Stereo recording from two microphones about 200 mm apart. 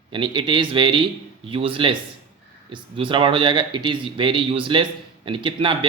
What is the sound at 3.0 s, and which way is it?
Speech, 25° right (ahead or behind).